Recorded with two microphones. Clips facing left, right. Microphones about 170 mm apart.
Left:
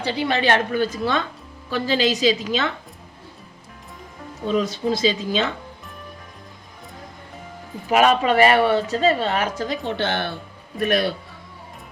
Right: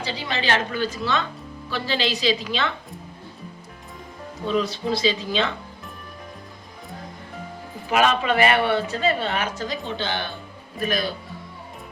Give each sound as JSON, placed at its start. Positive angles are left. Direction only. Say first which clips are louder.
{"t": 0.0, "sound": "a woman's voice", "louder": "left 6 dB", "side_deg": 55}
{"t": 4.4, "sound": "a woman's voice", "louder": "left 2 dB", "side_deg": 45}
{"t": 7.9, "sound": "speech", "louder": "left 3 dB", "side_deg": 40}
{"t": 10.0, "sound": "speech", "louder": "left 4 dB", "side_deg": 70}